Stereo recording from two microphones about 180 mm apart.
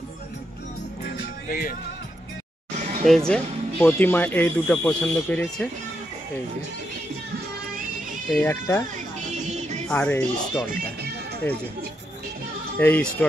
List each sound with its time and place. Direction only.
1.0 s music: 50° left (ahead or behind)
2.8 s a sound: 40° right (ahead or behind)
3.3 s speech: 5° left (ahead or behind)
8.3 s speech: 10° left (ahead or behind)
8.9 s music: 40° right (ahead or behind)
9.8 s speech: 10° left (ahead or behind)
10.7 s speech: 65° right (ahead or behind)
12.7 s speech: 10° left (ahead or behind)